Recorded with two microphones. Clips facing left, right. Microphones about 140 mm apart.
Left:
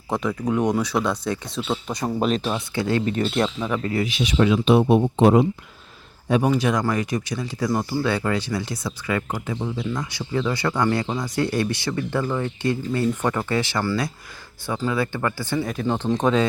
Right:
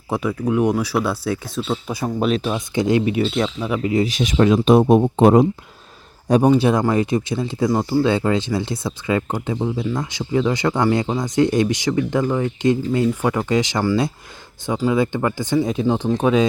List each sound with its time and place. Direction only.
0.1 s speech: 5° right (ahead or behind)
2.7 s speech: 15° right (ahead or behind)
3.2 s speech: centre (ahead or behind)
4.0 s speech: 45° right (ahead or behind); by 16.5 s 10° right (ahead or behind)